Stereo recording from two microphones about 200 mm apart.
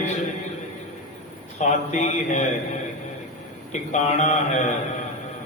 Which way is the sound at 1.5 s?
35° left (ahead or behind).